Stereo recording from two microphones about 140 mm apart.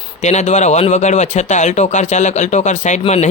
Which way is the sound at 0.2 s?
55° left (ahead or behind).